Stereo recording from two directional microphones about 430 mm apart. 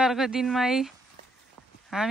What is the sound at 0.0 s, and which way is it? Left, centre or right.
Speech, centre.